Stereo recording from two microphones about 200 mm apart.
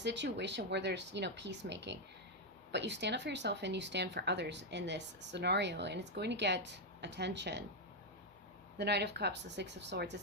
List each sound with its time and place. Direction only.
0.0 s speech: 60° right (ahead or behind)
8.8 s speech: 55° right (ahead or behind)